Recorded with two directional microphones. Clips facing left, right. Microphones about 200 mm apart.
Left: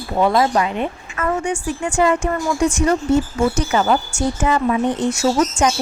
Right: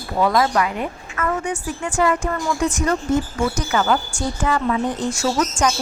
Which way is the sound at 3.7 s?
25° left (ahead or behind).